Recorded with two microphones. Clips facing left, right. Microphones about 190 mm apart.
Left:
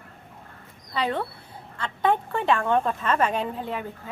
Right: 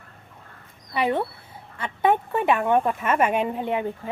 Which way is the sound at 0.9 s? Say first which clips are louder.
Right 3 dB; 15° right (ahead or behind).